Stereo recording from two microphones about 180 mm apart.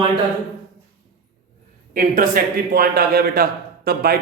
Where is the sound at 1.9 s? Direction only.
50° right (ahead or behind).